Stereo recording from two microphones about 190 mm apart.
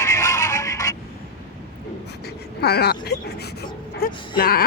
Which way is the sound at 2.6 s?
55° left (ahead or behind).